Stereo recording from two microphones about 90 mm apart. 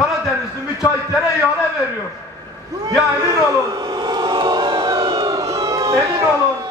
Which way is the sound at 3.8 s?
50° right (ahead or behind).